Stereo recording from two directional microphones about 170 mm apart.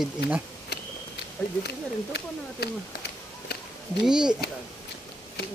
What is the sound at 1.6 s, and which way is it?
Speech, 75° left (ahead or behind).